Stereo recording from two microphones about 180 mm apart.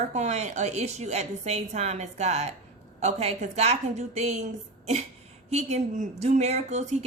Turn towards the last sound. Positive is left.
turn(degrees=-40)  # may be behind; listen again after turning